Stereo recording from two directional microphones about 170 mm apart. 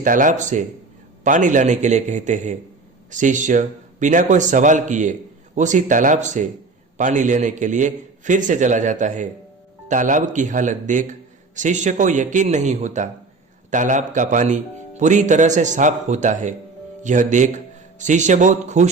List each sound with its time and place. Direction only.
0.0 s a man's voice: 50° right (ahead or behind)